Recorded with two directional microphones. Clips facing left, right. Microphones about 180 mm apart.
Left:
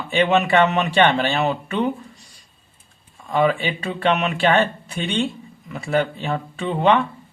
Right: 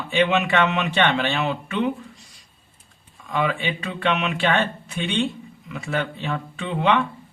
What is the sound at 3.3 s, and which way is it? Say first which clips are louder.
Speech: left 5 dB; 40° left (ahead or behind).